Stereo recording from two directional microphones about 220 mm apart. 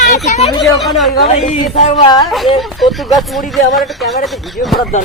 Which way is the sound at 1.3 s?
25° left (ahead or behind).